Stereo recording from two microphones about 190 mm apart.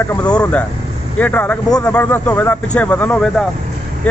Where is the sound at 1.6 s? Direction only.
20° left (ahead or behind).